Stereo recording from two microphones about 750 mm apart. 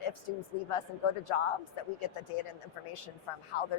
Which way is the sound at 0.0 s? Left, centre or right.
Left.